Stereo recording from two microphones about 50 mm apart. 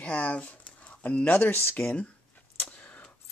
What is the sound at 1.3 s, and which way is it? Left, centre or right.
Speech, left.